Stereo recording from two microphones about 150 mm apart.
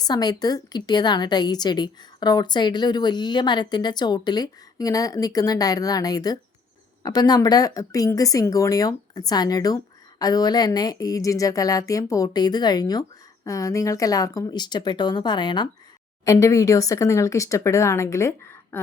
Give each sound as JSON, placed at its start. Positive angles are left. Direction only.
{"t": 0.0, "sound": "speech", "side_deg": 25}